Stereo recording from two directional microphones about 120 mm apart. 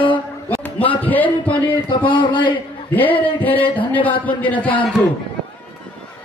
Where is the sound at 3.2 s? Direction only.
15° left (ahead or behind).